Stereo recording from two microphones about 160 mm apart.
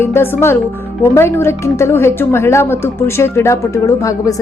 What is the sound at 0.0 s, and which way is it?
Speech, 15° left (ahead or behind).